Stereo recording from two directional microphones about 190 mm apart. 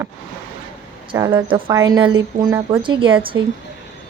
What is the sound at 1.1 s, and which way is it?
A woman's voice, 15° right (ahead or behind).